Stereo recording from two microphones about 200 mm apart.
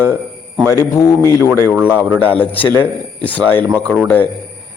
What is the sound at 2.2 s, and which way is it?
Speech, 5° left (ahead or behind).